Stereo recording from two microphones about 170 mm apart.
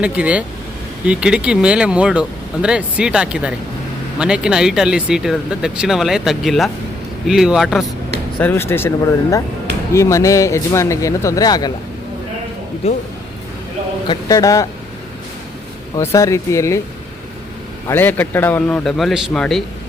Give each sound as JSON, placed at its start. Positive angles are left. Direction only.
{"t": 0.0, "sound": "speech", "side_deg": -5}
{"t": 8.4, "sound": "a man's voice", "side_deg": 10}
{"t": 12.8, "sound": "speech", "side_deg": 35}
{"t": 14.1, "sound": "speech", "side_deg": 20}
{"t": 16.0, "sound": "a man's voice", "side_deg": 20}
{"t": 17.8, "sound": "a man's voice", "side_deg": 10}